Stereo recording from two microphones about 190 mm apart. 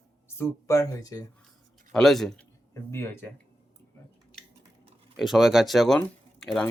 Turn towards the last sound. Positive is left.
turn(degrees=5)  # may be behind; listen again after turning